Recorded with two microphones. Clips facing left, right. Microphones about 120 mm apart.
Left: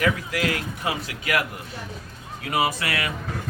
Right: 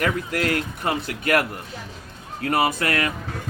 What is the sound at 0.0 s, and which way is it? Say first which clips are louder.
Speech: right 1 dB; 50° right (ahead or behind).